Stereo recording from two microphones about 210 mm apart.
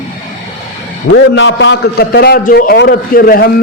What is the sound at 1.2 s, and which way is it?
A man's voice, 60° left (ahead or behind).